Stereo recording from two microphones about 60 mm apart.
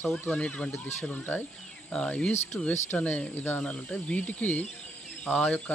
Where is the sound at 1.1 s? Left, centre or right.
Left.